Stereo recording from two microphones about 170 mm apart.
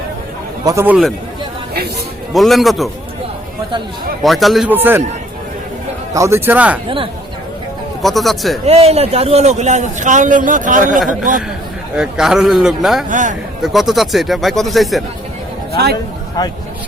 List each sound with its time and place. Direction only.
0.6 s a man's voice: 20° right (ahead or behind)
0.9 s speech: centre (ahead or behind)
2.3 s speech: centre (ahead or behind)
4.2 s speech: centre (ahead or behind)
4.7 s a man's voice: 10° right (ahead or behind)
6.1 s a man's voice: 15° right (ahead or behind)
6.8 s speech: 30° right (ahead or behind)
8.0 s speech: centre (ahead or behind)
8.6 s a man's voice: 35° right (ahead or behind)
11.9 s speech: 5° right (ahead or behind)
13.1 s a man's voice: 50° right (ahead or behind)
13.6 s speech: centre (ahead or behind)